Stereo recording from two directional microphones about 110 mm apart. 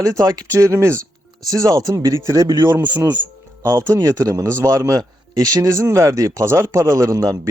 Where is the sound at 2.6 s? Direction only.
20° right (ahead or behind).